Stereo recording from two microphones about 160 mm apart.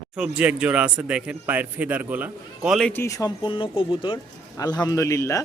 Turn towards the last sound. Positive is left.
turn(degrees=20)  # may be behind; listen again after turning